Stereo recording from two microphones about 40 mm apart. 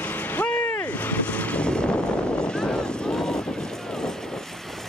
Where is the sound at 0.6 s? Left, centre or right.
Left.